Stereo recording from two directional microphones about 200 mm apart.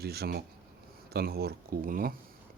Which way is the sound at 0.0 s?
50° right (ahead or behind).